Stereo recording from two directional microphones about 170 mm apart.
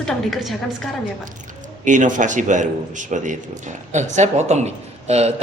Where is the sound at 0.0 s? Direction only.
Centre (ahead or behind).